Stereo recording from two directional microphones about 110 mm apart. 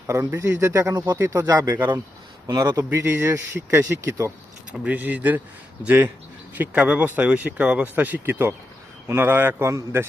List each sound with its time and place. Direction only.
0.1 s speech: 25° right (ahead or behind)
2.9 s speech: 20° right (ahead or behind)